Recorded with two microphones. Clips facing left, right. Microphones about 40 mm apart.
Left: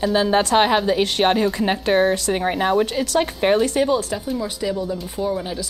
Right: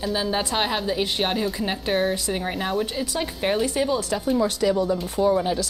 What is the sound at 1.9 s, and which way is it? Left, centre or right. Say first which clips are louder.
Speech: left 5 dB; centre.